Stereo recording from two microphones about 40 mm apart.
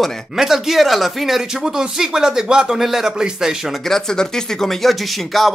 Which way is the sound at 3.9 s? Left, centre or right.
Centre.